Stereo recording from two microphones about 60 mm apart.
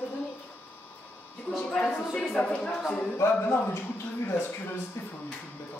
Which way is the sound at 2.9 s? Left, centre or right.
Left.